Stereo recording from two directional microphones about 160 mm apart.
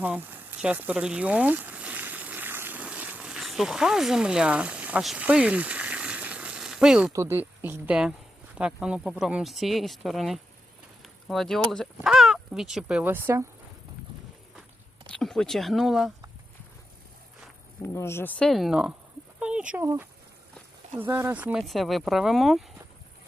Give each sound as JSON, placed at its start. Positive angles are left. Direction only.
{"t": 0.0, "sound": "sizzle", "side_deg": -10}
{"t": 7.1, "sound": "speech", "side_deg": -15}
{"t": 15.0, "sound": "speech", "side_deg": 5}
{"t": 17.8, "sound": "speech", "side_deg": 15}
{"t": 19.4, "sound": "a sound", "side_deg": -5}
{"t": 19.8, "sound": "speech", "side_deg": -15}
{"t": 21.6, "sound": "speech", "side_deg": 0}